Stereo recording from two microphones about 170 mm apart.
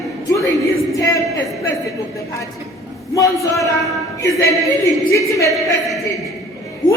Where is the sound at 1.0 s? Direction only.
20° left (ahead or behind).